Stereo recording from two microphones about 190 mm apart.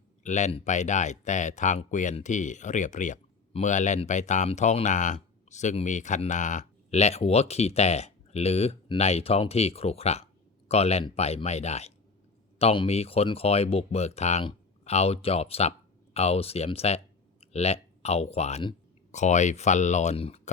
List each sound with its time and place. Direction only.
0.2 s speech: 40° left (ahead or behind)